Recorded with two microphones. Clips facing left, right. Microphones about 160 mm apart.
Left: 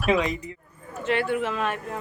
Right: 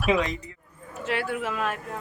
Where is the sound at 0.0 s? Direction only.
Centre (ahead or behind).